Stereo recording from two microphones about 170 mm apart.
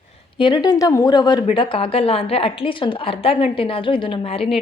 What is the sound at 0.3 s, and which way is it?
A woman's voice, 25° left (ahead or behind).